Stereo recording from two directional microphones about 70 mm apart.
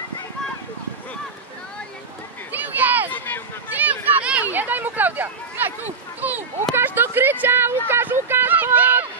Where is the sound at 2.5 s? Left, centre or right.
Right.